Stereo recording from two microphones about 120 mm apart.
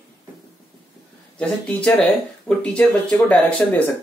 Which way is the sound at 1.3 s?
10° left (ahead or behind).